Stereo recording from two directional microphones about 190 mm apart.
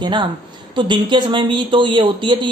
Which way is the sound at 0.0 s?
25° right (ahead or behind).